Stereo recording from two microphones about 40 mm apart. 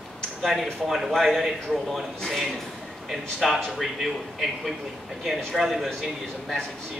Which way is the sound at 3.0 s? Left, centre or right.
Centre.